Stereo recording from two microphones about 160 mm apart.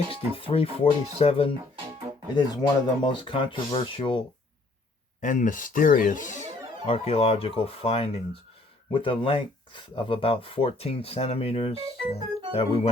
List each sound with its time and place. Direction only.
0.3 s speech: 35° left (ahead or behind)
2.3 s speech: 25° left (ahead or behind)
5.2 s speech: 55° left (ahead or behind)
6.8 s speech: 40° left (ahead or behind)